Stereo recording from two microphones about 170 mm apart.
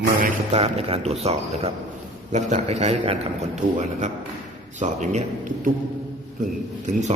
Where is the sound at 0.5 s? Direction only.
35° right (ahead or behind).